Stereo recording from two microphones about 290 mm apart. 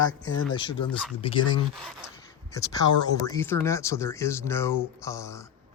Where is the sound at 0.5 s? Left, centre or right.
Centre.